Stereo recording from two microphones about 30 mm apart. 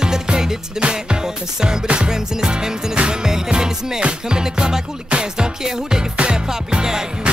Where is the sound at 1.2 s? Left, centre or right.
Right.